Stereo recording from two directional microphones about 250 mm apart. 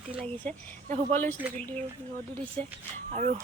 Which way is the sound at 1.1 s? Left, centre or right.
Centre.